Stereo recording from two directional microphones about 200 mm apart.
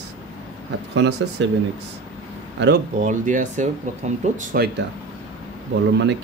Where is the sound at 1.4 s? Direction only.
65° right (ahead or behind).